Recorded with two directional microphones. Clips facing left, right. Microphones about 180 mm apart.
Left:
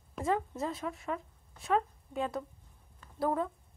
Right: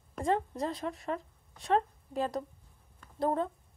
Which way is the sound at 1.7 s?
35° right (ahead or behind).